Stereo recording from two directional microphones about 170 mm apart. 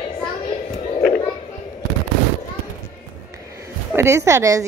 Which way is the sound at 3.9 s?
15° right (ahead or behind).